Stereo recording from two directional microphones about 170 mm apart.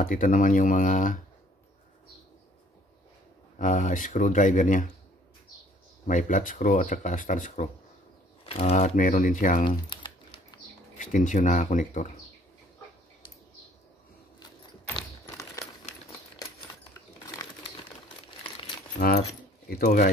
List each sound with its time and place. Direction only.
0.0 s speech: 55° left (ahead or behind)
3.5 s speech: 50° left (ahead or behind)
6.0 s speech: 50° left (ahead or behind)
8.5 s speech: 40° left (ahead or behind)
9.7 s crumpling: 30° left (ahead or behind)
11.0 s speech: 50° left (ahead or behind)
15.3 s a sound: 20° left (ahead or behind)
17.6 s crumpling: 30° left (ahead or behind)
18.9 s speech: 65° left (ahead or behind)